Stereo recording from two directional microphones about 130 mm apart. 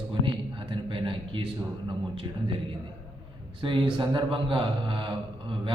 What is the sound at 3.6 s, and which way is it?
A man's voice, 40° right (ahead or behind).